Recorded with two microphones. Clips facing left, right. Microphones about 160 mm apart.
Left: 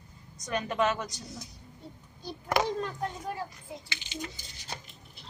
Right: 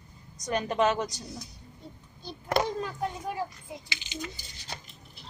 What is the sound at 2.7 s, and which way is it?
Speech, 5° right (ahead or behind).